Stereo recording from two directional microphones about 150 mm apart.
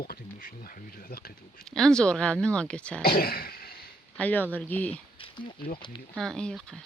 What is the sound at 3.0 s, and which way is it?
Throat clearing, 90° left.